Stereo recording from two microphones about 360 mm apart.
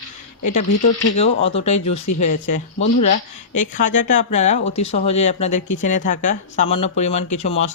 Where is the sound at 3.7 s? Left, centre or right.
Left.